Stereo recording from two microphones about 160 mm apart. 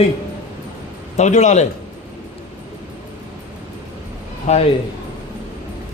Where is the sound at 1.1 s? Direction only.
45° left (ahead or behind).